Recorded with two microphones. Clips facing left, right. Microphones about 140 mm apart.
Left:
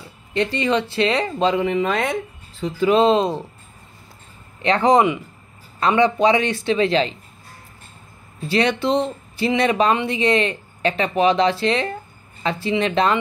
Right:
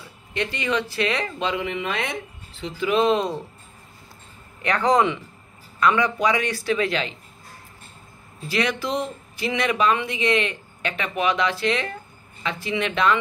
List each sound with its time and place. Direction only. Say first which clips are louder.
0.3 s speech: left 5 dB; 35° left (ahead or behind)
4.6 s speech: left 4 dB; 20° left (ahead or behind)
5.8 s speech: left 4 dB; 30° left (ahead or behind)
8.5 s speech: left 6 dB; 30° left (ahead or behind)